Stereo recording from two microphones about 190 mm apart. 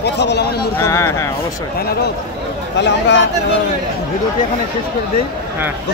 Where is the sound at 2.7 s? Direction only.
65° left (ahead or behind).